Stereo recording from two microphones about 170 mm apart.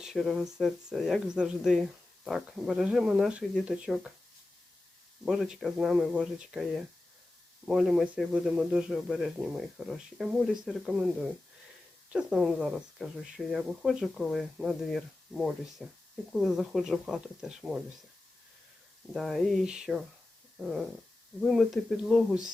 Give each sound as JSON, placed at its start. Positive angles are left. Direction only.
{"t": 0.0, "sound": "speech", "side_deg": 0}
{"t": 5.2, "sound": "speech", "side_deg": 0}
{"t": 19.1, "sound": "speech", "side_deg": 0}
{"t": 21.4, "sound": "speech", "side_deg": 0}